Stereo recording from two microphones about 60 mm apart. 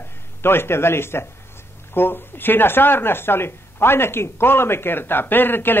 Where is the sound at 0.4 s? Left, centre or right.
Left.